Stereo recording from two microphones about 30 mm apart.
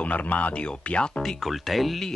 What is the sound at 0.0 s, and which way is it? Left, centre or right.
Speech, left.